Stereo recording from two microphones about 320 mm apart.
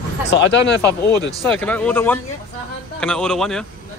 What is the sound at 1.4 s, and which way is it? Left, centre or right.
Speech, centre.